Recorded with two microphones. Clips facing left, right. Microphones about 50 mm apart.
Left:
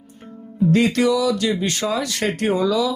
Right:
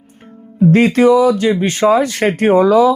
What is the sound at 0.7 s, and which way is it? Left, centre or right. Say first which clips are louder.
Speech: right 7 dB; right.